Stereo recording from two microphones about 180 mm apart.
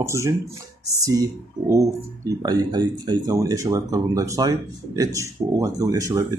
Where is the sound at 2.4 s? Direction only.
25° right (ahead or behind).